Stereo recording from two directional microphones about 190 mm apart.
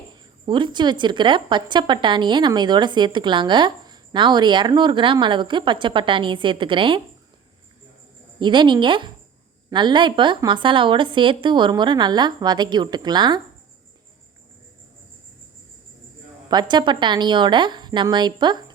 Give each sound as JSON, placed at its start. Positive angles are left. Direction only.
{"t": 0.4, "sound": "a woman's voice", "side_deg": -25}
{"t": 8.4, "sound": "a woman's voice", "side_deg": -25}
{"t": 16.5, "sound": "a woman's voice", "side_deg": -25}